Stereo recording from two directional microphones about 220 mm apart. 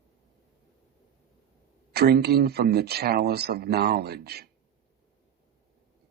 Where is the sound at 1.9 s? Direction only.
45° right (ahead or behind).